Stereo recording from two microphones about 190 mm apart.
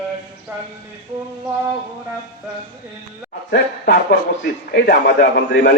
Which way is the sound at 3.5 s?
55° left (ahead or behind).